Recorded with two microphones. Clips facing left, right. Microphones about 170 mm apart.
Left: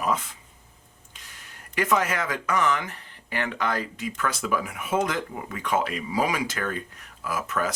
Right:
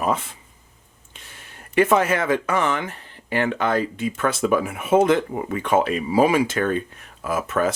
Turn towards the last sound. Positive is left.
turn(degrees=-25)  # may be behind; listen again after turning